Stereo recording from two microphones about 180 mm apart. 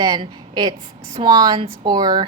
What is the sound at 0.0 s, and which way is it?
Speech, 25° right (ahead or behind).